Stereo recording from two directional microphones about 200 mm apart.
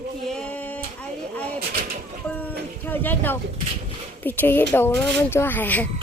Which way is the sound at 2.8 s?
10° left (ahead or behind).